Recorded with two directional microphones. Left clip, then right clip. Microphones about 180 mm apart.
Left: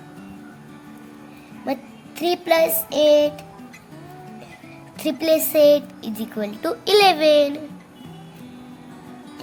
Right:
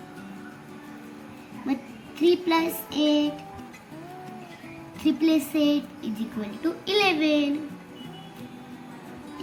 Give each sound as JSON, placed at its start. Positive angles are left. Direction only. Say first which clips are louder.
{"t": 1.6, "sound": "child singing", "louder": "left 4 dB", "side_deg": 75}
{"t": 5.0, "sound": "speech", "louder": "left 4 dB", "side_deg": 75}